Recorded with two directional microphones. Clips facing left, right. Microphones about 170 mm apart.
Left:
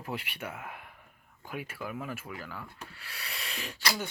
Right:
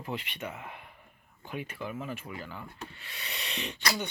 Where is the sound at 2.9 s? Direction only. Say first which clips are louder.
Right 1 dB; 5° left (ahead or behind).